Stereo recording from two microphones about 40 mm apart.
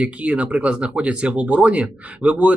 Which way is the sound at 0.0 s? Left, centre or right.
Right.